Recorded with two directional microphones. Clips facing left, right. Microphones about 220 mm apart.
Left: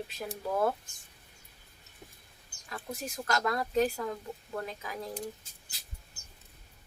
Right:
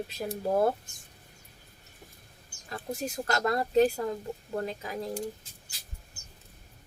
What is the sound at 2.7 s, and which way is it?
Speech, 30° right (ahead or behind).